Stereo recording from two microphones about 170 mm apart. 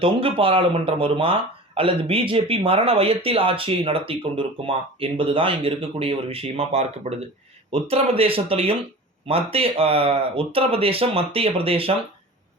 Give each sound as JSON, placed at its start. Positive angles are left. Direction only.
{"t": 0.0, "sound": "speech", "side_deg": -30}